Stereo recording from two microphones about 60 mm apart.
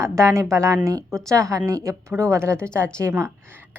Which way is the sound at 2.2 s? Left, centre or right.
Right.